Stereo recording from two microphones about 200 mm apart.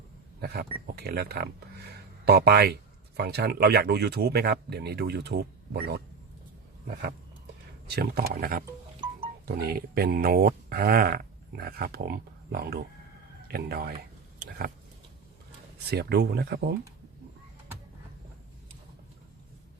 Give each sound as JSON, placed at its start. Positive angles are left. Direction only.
{"t": 0.4, "sound": "speech", "side_deg": -55}
{"t": 7.9, "sound": "speech", "side_deg": -55}
{"t": 9.6, "sound": "speech", "side_deg": -50}
{"t": 15.9, "sound": "speech", "side_deg": -55}